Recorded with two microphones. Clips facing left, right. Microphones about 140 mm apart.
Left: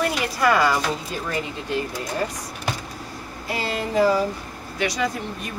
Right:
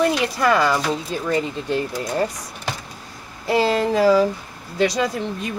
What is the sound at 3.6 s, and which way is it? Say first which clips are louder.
Speech: right 3 dB; 90° right.